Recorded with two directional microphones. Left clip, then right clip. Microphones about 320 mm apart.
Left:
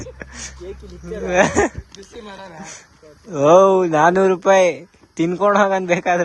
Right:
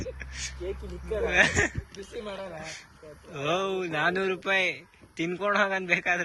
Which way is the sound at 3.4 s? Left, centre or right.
Left.